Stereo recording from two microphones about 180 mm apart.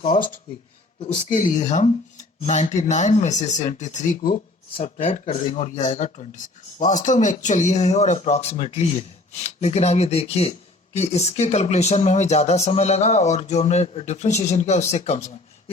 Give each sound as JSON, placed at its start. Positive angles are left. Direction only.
{"t": 0.1, "sound": "speech", "side_deg": 45}
{"t": 1.3, "sound": "speech", "side_deg": 50}
{"t": 4.8, "sound": "speech", "side_deg": 40}